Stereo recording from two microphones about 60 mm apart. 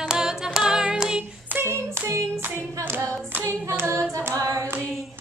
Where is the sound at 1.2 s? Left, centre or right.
Right.